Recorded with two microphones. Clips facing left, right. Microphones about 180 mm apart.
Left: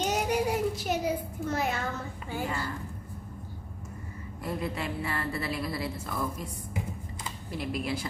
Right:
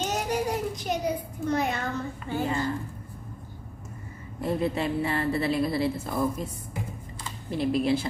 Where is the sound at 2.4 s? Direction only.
20° right (ahead or behind).